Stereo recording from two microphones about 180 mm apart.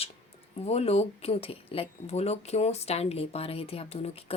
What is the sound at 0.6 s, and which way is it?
Speech, 35° left (ahead or behind).